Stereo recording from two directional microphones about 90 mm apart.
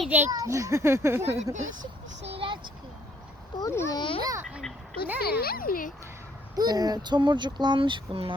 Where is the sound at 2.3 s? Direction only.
70° right (ahead or behind).